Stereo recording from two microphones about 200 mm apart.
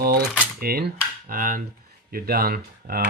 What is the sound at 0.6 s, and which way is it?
Cutlery, 50° right (ahead or behind).